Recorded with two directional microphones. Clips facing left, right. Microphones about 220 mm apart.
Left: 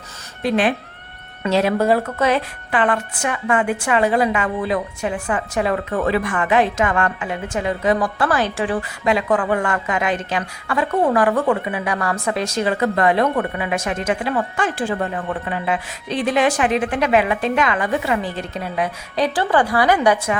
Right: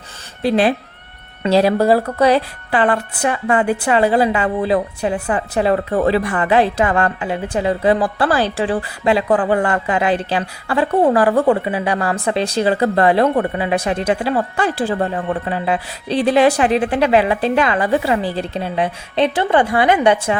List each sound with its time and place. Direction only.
0.4 s a woman's voice: 35° right (ahead or behind)